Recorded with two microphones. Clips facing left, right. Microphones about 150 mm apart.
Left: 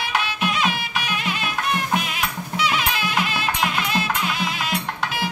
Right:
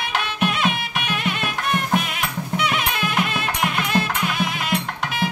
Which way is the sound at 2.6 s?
55° right (ahead or behind).